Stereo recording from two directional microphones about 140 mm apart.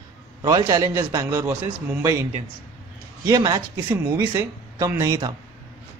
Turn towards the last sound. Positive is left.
turn(degrees=-20)  # may be behind; listen again after turning